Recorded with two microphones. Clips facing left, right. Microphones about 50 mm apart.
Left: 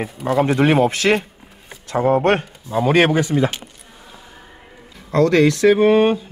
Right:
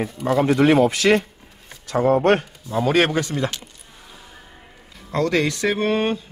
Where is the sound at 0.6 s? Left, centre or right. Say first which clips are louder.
Even; left.